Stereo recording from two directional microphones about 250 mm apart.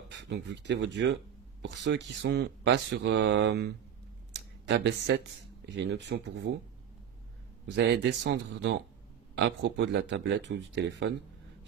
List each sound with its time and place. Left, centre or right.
0.1 s speech: right
4.3 s a sound: right
5.7 s speech: right
7.7 s speech: right